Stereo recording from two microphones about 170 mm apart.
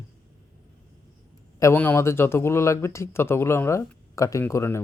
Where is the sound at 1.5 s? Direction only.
15° left (ahead or behind).